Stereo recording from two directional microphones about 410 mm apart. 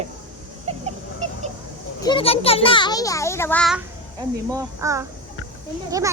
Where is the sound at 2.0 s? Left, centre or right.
Centre.